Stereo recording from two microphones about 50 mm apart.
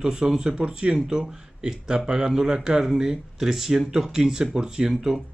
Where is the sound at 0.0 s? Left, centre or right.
Centre.